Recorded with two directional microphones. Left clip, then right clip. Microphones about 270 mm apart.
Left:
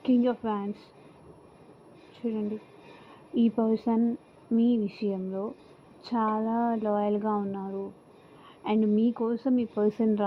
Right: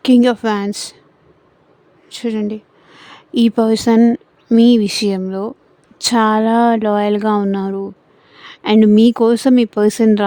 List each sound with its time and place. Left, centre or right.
0.0 s speech: right
2.1 s speech: right